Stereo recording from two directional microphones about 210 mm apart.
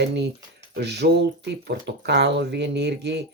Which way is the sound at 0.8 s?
50° right (ahead or behind).